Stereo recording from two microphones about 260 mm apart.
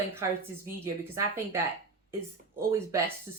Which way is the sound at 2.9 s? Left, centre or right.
Centre.